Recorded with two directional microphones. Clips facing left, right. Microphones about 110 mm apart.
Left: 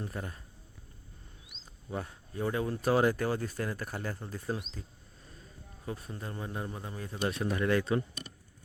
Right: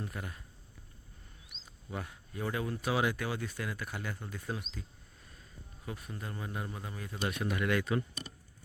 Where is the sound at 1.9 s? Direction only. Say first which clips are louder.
Left 3 dB; 30° left (ahead or behind).